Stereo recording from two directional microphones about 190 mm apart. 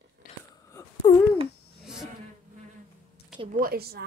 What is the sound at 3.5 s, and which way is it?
Speech, 50° right (ahead or behind).